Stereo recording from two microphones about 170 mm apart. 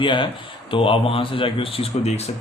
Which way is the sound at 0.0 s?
30° left (ahead or behind).